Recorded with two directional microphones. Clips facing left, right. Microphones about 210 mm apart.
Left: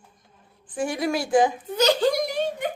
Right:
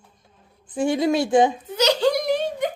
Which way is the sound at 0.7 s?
25° right (ahead or behind).